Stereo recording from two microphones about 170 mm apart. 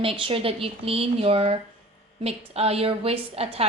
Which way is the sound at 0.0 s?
30° right (ahead or behind).